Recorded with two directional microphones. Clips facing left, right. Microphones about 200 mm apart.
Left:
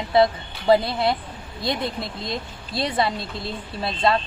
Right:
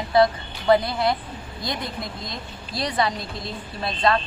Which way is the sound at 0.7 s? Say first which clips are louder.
Left 1 dB; 25° left (ahead or behind).